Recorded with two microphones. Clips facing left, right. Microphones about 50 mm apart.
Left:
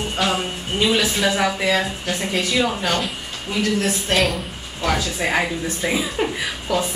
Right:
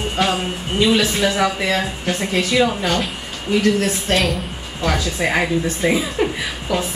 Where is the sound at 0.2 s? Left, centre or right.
Centre.